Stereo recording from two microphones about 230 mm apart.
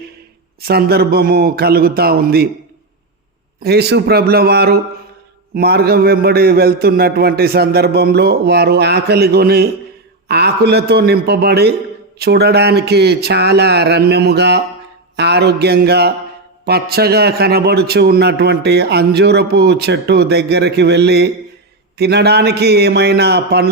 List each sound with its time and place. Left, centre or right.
0.6 s a man's voice: right
3.6 s a man's voice: right